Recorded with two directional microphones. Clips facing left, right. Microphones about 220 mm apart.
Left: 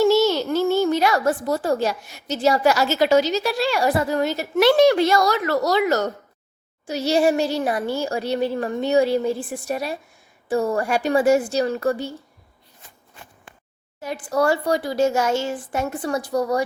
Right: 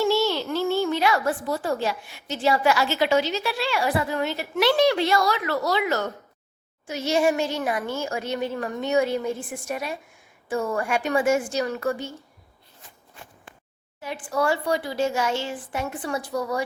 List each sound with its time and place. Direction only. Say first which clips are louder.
0.0 s a child's voice: left 5 dB; 45° left (ahead or behind)
14.0 s a child's voice: left 4 dB; 40° left (ahead or behind)